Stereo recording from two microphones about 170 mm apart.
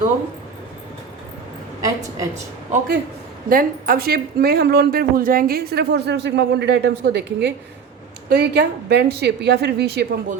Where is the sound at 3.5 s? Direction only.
60° right (ahead or behind); by 10.0 s 75° right (ahead or behind).